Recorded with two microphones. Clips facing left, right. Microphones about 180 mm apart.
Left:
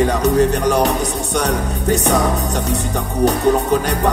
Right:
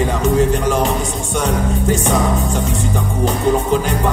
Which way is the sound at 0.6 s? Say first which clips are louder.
Left 1 dB; 70° left (ahead or behind).